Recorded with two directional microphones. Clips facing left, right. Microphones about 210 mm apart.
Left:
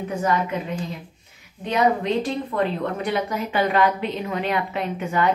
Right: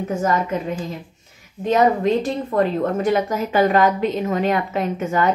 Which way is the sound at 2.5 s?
45° right (ahead or behind).